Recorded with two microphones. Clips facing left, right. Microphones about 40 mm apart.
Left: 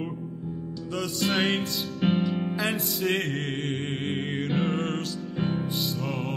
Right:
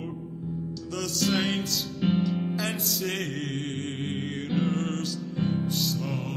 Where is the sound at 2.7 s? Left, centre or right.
Centre.